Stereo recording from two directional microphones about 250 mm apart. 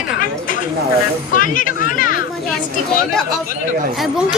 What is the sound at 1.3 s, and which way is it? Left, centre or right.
Speech, left.